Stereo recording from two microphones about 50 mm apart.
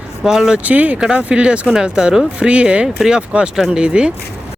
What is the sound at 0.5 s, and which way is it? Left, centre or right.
Speech, right.